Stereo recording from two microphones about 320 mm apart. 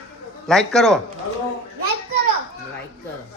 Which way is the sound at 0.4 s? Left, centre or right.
Centre.